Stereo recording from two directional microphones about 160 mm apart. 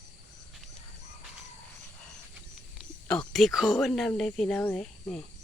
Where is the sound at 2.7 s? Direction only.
5° left (ahead or behind).